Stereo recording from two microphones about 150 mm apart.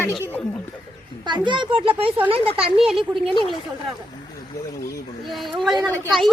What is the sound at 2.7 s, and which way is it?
Speech, centre (ahead or behind).